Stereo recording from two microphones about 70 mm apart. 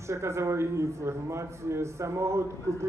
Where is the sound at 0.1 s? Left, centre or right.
Right.